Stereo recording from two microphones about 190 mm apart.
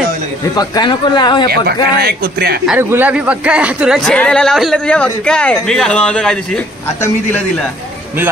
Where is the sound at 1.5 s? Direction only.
55° right (ahead or behind).